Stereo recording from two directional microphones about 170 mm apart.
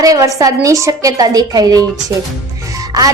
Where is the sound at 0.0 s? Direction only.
20° right (ahead or behind).